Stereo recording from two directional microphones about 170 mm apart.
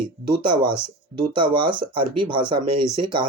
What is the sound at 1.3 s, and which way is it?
Speech, 30° right (ahead or behind).